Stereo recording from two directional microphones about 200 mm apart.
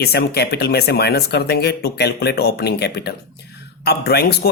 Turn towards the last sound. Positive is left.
turn(degrees=55)  # may be behind; listen again after turning